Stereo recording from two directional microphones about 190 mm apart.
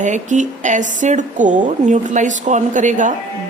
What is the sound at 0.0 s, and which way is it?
A woman's voice, 40° right (ahead or behind).